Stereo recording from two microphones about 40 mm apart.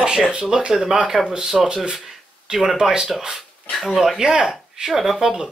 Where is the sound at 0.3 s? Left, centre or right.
Right.